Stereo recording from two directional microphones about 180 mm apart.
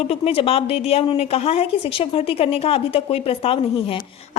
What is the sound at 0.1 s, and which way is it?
A woman's voice, 30° left (ahead or behind).